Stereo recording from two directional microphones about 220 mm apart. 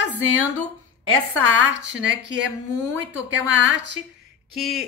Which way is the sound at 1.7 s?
50° right (ahead or behind).